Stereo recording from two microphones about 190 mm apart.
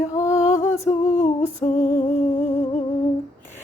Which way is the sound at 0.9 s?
35° left (ahead or behind).